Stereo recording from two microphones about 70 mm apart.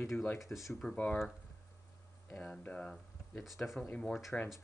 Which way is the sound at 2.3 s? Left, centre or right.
Centre.